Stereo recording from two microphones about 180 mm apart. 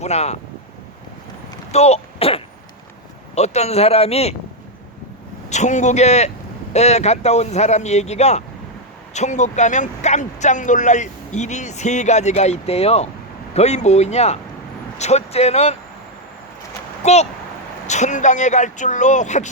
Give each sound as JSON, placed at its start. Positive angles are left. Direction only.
{"t": 0.0, "sound": "speech", "side_deg": 35}
{"t": 1.7, "sound": "speech", "side_deg": 35}
{"t": 5.5, "sound": "speech", "side_deg": 40}
{"t": 17.0, "sound": "speech", "side_deg": 40}